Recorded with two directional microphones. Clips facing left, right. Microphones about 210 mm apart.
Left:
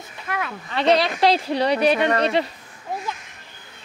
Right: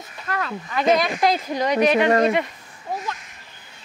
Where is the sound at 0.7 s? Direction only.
30° left (ahead or behind).